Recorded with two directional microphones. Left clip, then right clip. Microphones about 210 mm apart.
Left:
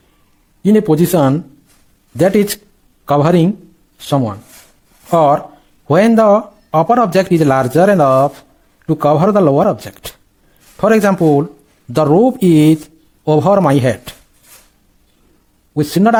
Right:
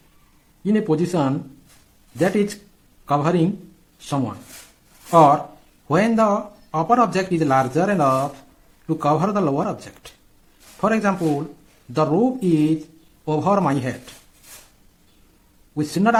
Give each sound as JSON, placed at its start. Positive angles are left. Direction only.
{"t": 0.6, "sound": "speech", "side_deg": 45}
{"t": 15.7, "sound": "a man's voice", "side_deg": 40}